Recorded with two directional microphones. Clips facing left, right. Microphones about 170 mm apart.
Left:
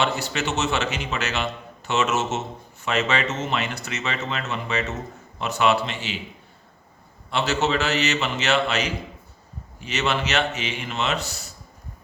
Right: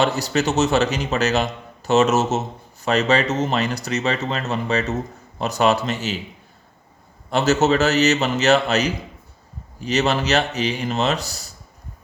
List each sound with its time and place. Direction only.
0.0 s a man's voice: 40° right (ahead or behind)
7.3 s a man's voice: 40° right (ahead or behind)